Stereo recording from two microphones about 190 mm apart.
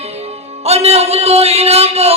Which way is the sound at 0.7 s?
35° right (ahead or behind).